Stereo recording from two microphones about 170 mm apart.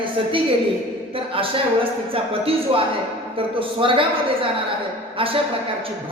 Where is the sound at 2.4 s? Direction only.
35° right (ahead or behind).